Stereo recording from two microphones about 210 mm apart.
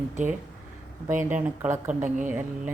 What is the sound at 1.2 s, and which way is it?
Speech, 10° right (ahead or behind).